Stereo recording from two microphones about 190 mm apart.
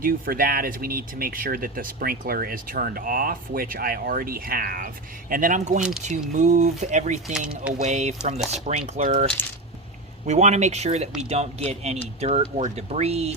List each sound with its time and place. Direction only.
0.0 s speech: 50° right (ahead or behind)
7.3 s speech: 5° right (ahead or behind)
7.8 s speech: 35° right (ahead or behind)
9.4 s coin: 10° left (ahead or behind)
10.2 s speech: 35° right (ahead or behind)